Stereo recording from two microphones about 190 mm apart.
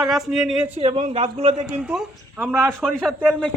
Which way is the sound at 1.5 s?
20° right (ahead or behind).